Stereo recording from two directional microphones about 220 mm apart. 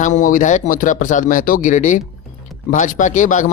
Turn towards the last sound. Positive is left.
turn(degrees=35)  # may be behind; listen again after turning